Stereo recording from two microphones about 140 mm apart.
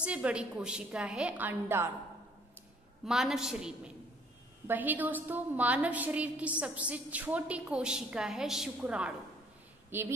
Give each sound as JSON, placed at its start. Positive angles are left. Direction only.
{"t": 0.0, "sound": "a woman's voice", "side_deg": -10}
{"t": 3.1, "sound": "a woman's voice", "side_deg": -5}